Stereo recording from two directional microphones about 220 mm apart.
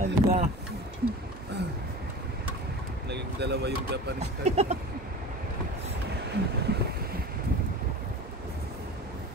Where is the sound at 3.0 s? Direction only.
50° right (ahead or behind).